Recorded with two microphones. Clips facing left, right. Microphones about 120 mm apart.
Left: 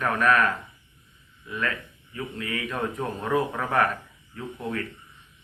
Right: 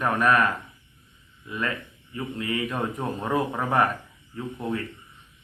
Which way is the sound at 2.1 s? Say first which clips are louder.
Right 3 dB; 20° right (ahead or behind).